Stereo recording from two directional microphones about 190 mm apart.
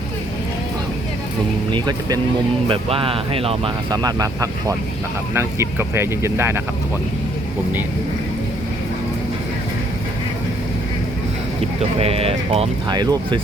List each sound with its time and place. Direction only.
1.7 s speech: 20° right (ahead or behind)
11.9 s speech: 30° right (ahead or behind)